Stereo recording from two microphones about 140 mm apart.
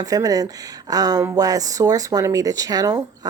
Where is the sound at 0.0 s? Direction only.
25° right (ahead or behind).